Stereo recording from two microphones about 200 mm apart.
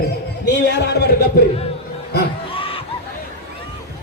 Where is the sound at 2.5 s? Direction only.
25° left (ahead or behind).